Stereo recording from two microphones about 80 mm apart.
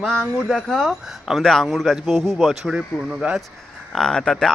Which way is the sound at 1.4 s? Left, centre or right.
Centre.